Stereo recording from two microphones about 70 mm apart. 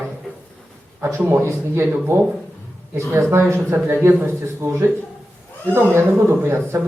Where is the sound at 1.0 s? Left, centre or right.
Right.